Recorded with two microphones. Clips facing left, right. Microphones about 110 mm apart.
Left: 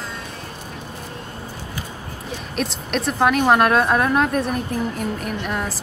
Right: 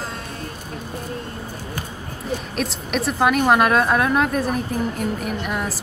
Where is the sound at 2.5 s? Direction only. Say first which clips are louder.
Left 4 dB; centre (ahead or behind).